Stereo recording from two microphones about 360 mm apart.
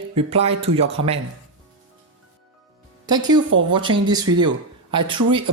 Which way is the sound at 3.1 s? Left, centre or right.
Centre.